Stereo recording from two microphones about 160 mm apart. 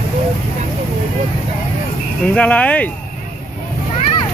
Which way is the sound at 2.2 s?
5° left (ahead or behind).